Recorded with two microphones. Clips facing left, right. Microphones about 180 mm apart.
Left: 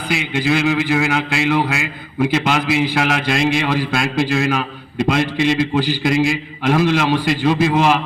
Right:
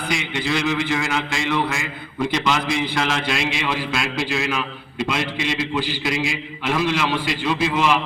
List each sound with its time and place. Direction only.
0.1 s a man's voice: 5° left (ahead or behind)
0.5 s a man's voice: 60° left (ahead or behind)
2.8 s a man's voice: 70° left (ahead or behind)
3.2 s a man's voice: 45° left (ahead or behind)